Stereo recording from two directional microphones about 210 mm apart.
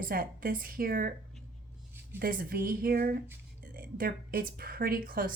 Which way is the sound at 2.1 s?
45° right (ahead or behind).